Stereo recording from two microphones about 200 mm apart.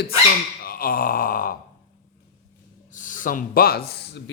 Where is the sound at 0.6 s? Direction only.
45° left (ahead or behind).